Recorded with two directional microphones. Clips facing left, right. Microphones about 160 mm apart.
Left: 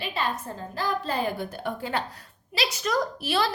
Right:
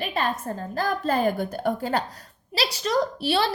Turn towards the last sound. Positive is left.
turn(degrees=-30)  # may be behind; listen again after turning